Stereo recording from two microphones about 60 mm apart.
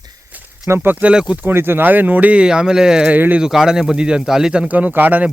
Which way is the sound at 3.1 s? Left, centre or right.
Right.